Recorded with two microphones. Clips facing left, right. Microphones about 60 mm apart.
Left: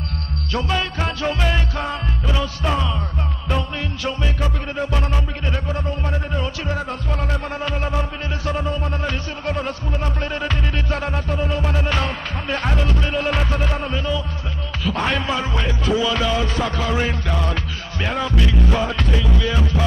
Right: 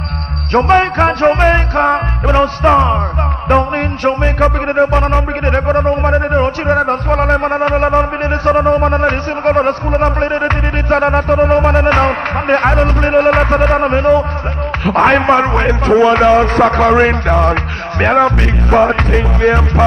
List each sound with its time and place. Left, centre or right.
0.5 s music: right